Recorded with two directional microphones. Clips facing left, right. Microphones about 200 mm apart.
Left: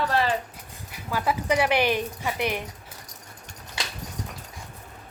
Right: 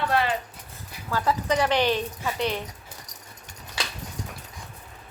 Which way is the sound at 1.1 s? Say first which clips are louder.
Even; 10° left (ahead or behind).